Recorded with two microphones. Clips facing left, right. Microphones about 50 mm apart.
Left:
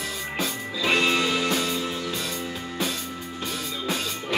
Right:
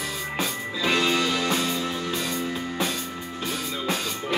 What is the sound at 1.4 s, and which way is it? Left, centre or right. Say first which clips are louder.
Music: even; centre.